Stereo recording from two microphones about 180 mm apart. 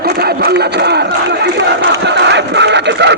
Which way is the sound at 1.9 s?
75° right (ahead or behind).